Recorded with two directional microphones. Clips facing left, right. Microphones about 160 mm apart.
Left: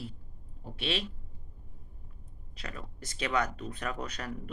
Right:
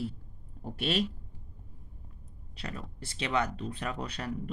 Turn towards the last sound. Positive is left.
turn(degrees=-30)  # may be behind; listen again after turning